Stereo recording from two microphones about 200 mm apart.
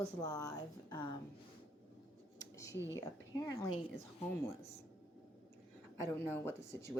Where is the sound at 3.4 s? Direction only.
15° left (ahead or behind).